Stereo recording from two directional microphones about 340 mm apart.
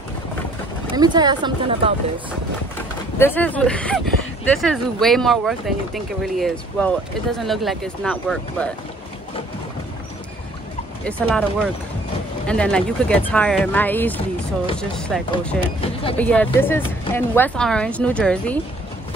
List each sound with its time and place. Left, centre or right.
0.9 s a woman's voice: centre
3.2 s speech: centre
11.1 s speech: centre
12.4 s speech: centre
15.8 s speech: centre
16.2 s speech: centre